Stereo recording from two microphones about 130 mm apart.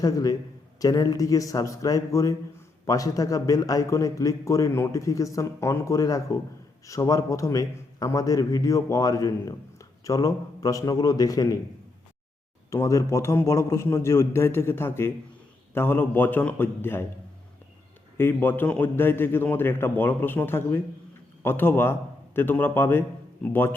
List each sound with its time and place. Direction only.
0.0 s a man's voice: 30° left (ahead or behind)
12.7 s a man's voice: 25° left (ahead or behind)
18.2 s a man's voice: 15° left (ahead or behind)